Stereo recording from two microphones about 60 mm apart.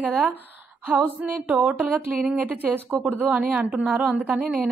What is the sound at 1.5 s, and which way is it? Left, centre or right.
Speech, right.